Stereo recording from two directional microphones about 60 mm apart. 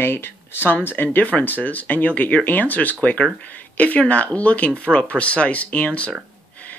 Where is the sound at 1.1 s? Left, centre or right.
Left.